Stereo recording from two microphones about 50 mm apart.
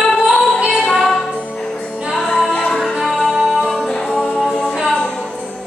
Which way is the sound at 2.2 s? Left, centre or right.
Centre.